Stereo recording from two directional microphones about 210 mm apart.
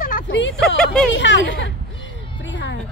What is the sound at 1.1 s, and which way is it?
Speech, 60° left (ahead or behind).